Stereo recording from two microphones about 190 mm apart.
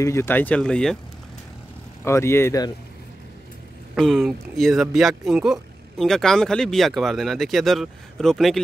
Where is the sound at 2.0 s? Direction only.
15° left (ahead or behind).